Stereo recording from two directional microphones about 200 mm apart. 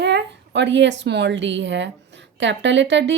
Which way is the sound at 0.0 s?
60° right (ahead or behind).